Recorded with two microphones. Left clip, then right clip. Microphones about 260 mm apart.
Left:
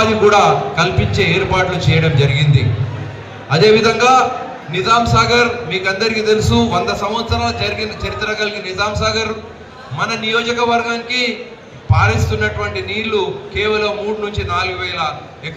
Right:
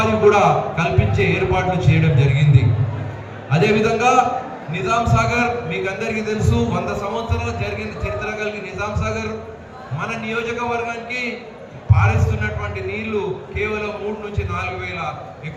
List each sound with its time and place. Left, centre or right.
0.0 s a man's voice: left
3.5 s a man's voice: centre